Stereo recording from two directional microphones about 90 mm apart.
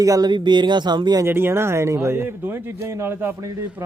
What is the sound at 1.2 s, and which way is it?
Speech, 25° right (ahead or behind).